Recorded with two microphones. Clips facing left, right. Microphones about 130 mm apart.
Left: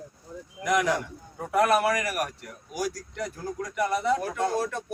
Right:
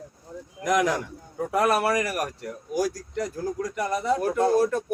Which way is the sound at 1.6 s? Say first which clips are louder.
Right 1 dB; 40° right (ahead or behind).